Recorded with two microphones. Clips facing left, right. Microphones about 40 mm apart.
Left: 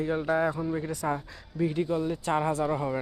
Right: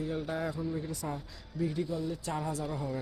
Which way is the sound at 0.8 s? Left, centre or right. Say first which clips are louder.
Left 7 dB; left.